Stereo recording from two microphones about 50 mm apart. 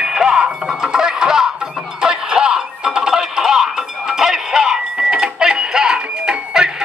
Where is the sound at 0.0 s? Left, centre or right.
Centre.